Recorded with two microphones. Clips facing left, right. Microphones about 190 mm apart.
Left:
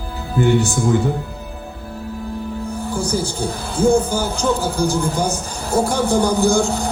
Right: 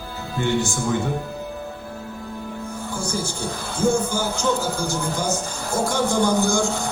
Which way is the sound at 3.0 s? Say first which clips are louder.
Left 4 dB; 35° left (ahead or behind).